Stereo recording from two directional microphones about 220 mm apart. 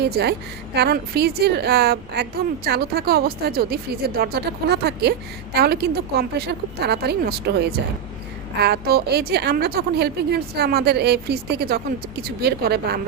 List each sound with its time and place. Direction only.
0.0 s a woman's voice: 50° right (ahead or behind)